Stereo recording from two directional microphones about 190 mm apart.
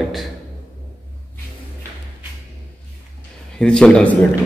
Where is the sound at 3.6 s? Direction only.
5° left (ahead or behind).